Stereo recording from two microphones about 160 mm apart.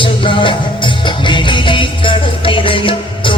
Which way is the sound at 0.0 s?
30° left (ahead or behind).